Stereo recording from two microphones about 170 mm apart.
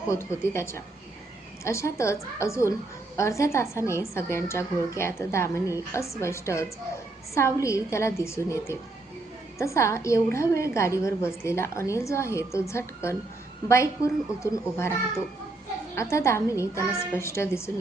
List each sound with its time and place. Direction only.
0.1 s a woman's voice: 15° left (ahead or behind)
16.0 s a woman's voice: 15° left (ahead or behind)